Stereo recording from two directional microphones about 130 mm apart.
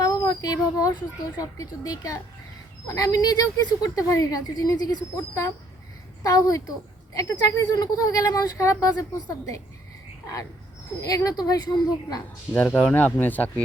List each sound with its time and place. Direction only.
0.3 s speech: 30° left (ahead or behind)
11.0 s speech: 25° left (ahead or behind)
12.5 s speech: 10° left (ahead or behind)